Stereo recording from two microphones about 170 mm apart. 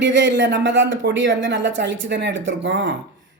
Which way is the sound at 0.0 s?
90° right.